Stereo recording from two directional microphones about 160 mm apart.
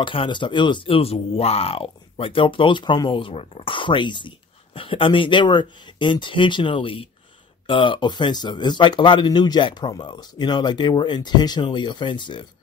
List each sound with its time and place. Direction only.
0.0 s a man's voice: 30° left (ahead or behind)